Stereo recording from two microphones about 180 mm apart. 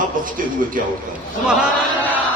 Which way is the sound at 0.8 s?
50° right (ahead or behind).